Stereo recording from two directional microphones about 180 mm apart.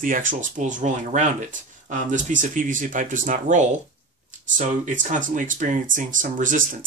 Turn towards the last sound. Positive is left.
turn(degrees=-45)  # may be behind; listen again after turning